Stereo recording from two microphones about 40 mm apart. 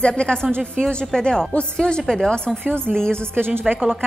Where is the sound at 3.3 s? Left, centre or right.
Right.